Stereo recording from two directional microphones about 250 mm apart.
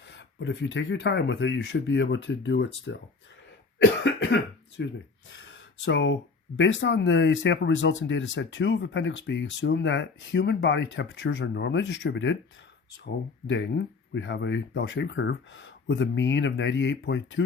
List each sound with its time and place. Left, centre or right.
0.1 s speech: left
4.0 s cough: left
4.8 s speech: left
5.3 s a sound: left
6.6 s speech: left
13.5 s speech: left